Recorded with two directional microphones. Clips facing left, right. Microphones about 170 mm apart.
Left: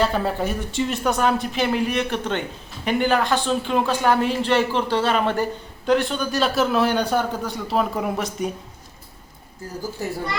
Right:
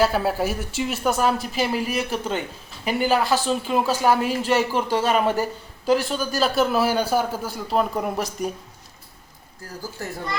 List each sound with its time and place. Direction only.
0.0 s a man's voice: 5° right (ahead or behind)
10.0 s speech: 15° left (ahead or behind)